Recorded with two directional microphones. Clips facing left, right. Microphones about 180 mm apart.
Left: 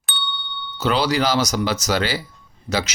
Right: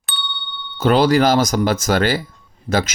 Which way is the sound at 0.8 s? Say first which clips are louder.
Right 6 dB; 50° right (ahead or behind).